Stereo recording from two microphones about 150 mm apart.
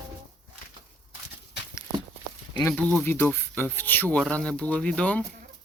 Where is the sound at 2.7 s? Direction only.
10° left (ahead or behind).